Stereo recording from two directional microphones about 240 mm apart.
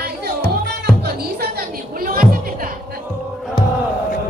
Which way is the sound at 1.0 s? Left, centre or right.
Right.